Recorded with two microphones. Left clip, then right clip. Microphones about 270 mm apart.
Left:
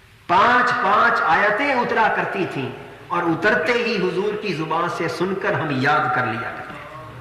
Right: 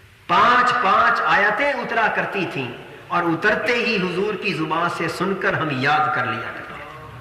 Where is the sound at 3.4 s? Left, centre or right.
Centre.